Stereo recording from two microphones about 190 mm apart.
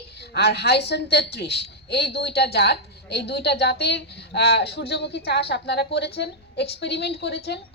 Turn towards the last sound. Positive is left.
turn(degrees=60)  # may be behind; listen again after turning